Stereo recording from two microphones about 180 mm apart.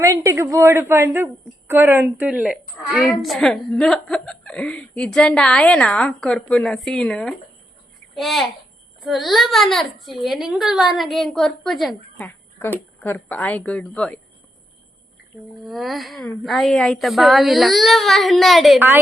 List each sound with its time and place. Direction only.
0.0 s a woman's voice: 15° right (ahead or behind); by 14.2 s 5° left (ahead or behind)
15.6 s a child's voice: centre (ahead or behind)